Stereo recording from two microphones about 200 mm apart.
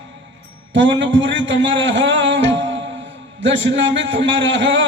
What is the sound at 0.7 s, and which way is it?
A man's voice, 65° right (ahead or behind).